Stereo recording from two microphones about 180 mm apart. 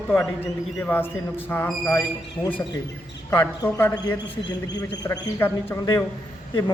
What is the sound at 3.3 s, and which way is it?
Speech, 15° left (ahead or behind).